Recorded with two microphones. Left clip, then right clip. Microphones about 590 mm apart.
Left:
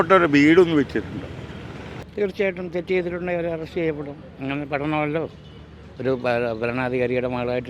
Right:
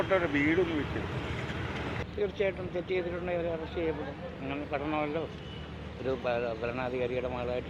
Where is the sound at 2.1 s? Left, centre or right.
Left.